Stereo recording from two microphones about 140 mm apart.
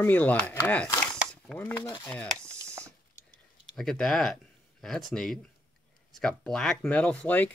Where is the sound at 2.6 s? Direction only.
20° right (ahead or behind).